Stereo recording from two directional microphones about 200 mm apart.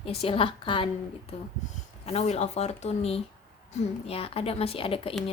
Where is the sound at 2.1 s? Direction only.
30° left (ahead or behind).